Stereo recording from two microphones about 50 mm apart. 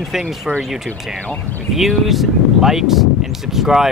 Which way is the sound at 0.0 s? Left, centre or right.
Centre.